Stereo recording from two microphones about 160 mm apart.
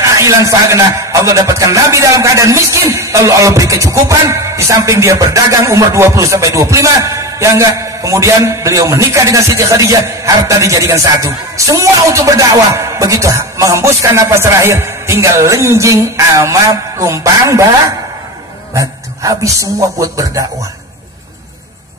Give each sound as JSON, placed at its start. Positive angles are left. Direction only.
{"t": 0.0, "sound": "a man's voice", "side_deg": -20}